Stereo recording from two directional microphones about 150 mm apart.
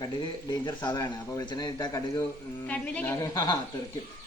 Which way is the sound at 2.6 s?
10° left (ahead or behind).